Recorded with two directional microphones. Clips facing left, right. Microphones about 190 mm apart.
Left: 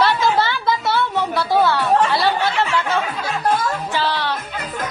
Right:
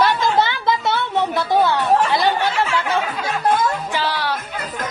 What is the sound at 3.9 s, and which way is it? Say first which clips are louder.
Music: left 1 dB; 10° right (ahead or behind).